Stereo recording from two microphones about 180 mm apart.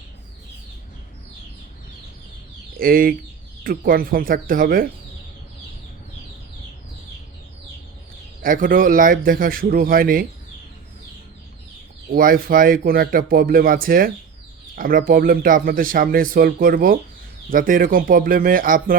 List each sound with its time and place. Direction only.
2.7 s speech: 50° right (ahead or behind)
8.4 s speech: 50° right (ahead or behind)
12.1 s speech: 55° right (ahead or behind)